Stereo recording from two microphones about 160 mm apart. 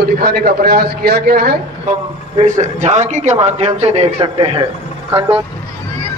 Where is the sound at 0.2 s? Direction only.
70° right (ahead or behind).